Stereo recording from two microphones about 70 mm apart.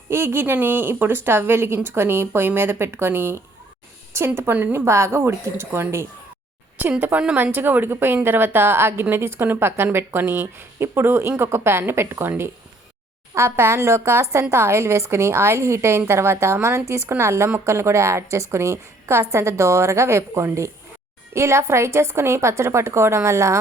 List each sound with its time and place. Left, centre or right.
0.1 s a woman's voice: right
7.3 s a woman's voice: right
13.3 s a woman's voice: right